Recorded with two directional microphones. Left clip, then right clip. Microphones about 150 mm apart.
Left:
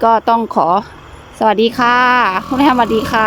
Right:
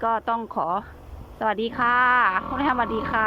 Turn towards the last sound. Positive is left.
turn(degrees=25)  # may be behind; listen again after turning